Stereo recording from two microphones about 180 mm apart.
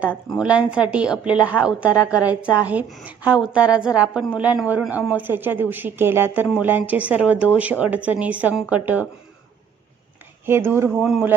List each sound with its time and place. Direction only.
0.3 s a man's voice: 5° right (ahead or behind)
10.4 s a man's voice: 15° right (ahead or behind)